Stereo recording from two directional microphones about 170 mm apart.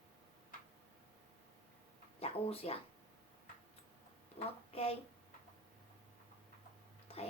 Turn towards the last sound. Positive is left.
turn(degrees=35)  # may be behind; listen again after turning